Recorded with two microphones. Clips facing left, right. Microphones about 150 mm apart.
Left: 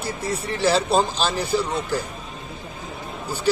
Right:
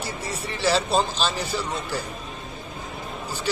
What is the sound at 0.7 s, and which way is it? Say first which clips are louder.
Speech: left 2 dB; 10° left (ahead or behind).